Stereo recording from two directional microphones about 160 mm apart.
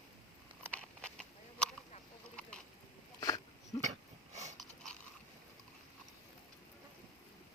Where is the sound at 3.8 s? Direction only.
45° right (ahead or behind).